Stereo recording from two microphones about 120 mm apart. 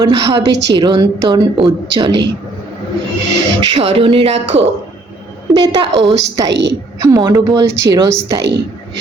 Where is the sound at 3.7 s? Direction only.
50° right (ahead or behind).